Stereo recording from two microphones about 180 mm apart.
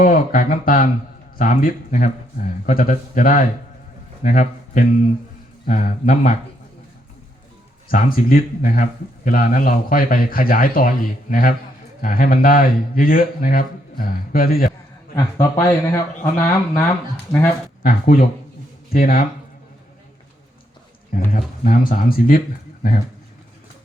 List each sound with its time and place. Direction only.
0.0 s a man's voice: 50° left (ahead or behind)
7.9 s speech: 50° left (ahead or behind)
15.1 s speech: 15° left (ahead or behind)
17.8 s speech: 55° left (ahead or behind)
21.3 s speech: 50° left (ahead or behind)